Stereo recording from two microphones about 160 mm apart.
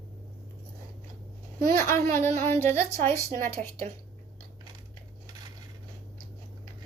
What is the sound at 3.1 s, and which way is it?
Speech, 45° right (ahead or behind).